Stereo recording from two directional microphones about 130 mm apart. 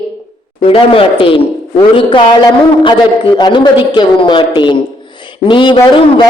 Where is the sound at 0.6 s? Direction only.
45° left (ahead or behind).